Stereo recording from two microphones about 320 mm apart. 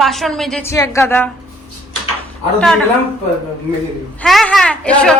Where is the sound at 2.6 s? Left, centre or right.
Centre.